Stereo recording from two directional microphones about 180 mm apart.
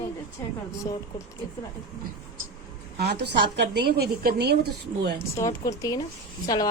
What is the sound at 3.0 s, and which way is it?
A woman's voice, 65° right (ahead or behind).